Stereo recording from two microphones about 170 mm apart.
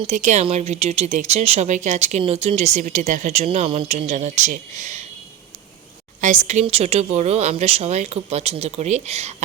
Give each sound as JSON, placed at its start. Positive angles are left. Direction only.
{"t": 0.1, "sound": "speech", "side_deg": -45}
{"t": 6.2, "sound": "speech", "side_deg": -45}